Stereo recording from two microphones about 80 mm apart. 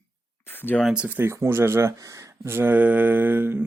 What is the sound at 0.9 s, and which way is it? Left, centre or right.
Speech, centre.